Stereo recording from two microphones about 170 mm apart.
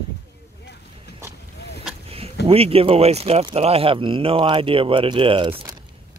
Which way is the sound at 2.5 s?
35° right (ahead or behind).